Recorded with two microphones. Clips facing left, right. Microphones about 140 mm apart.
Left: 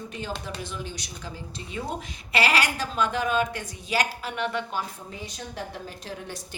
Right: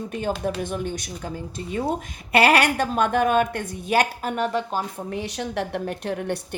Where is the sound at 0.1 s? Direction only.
50° right (ahead or behind).